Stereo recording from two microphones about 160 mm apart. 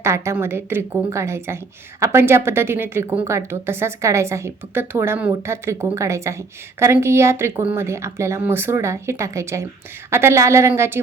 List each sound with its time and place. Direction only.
0.0 s a woman's voice: 15° right (ahead or behind)